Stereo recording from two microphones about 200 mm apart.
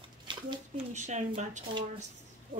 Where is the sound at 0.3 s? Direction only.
20° right (ahead or behind).